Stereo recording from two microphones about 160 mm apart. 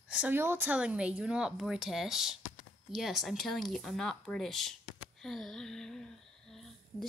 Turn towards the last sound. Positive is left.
turn(degrees=0)  # may be behind; listen again after turning